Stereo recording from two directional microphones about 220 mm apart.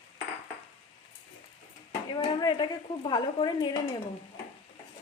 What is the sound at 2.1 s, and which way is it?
Speech, 20° left (ahead or behind).